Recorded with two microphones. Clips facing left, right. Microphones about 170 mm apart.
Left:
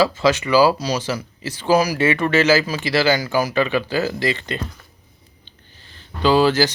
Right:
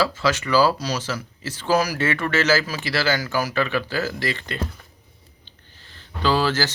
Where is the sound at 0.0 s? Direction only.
20° left (ahead or behind).